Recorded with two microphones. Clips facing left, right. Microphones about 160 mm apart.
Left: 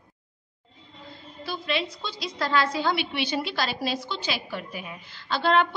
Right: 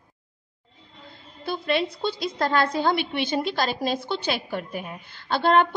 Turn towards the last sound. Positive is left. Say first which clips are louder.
# right 3 dB
turn(degrees=-50)  # may be behind; listen again after turning